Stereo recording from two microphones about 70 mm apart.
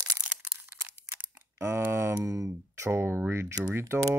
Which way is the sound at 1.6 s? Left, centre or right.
Right.